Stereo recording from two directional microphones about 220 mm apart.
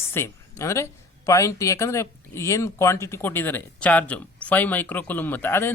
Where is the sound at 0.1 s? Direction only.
10° left (ahead or behind).